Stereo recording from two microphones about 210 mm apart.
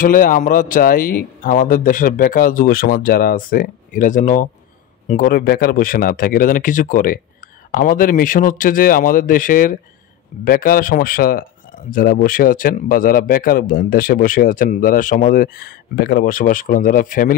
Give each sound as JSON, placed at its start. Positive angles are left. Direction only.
{"t": 0.0, "sound": "speech", "side_deg": 40}